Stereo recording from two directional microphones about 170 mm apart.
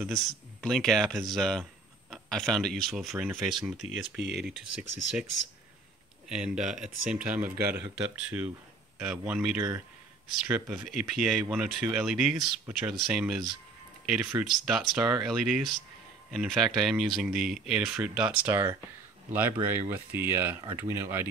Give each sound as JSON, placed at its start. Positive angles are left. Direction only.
{"t": 0.6, "sound": "speech", "side_deg": 5}
{"t": 4.2, "sound": "speech", "side_deg": -80}
{"t": 6.2, "sound": "speech", "side_deg": -5}
{"t": 7.4, "sound": "speech", "side_deg": -60}
{"t": 7.7, "sound": "speech", "side_deg": -10}
{"t": 9.6, "sound": "speech", "side_deg": -15}
{"t": 10.4, "sound": "speech", "side_deg": -5}